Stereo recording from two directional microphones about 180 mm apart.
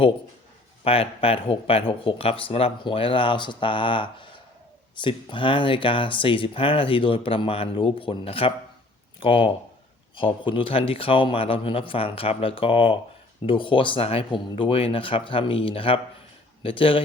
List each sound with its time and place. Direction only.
0.9 s a man's voice: 30° left (ahead or behind)